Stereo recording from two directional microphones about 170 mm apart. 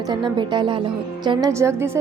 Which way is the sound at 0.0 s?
25° right (ahead or behind).